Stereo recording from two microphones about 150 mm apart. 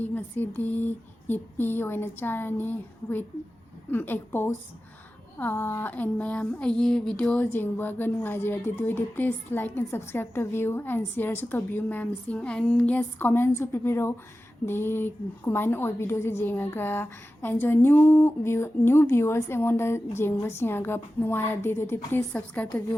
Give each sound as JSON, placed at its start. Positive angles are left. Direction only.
{"t": 0.0, "sound": "a woman's voice", "side_deg": 10}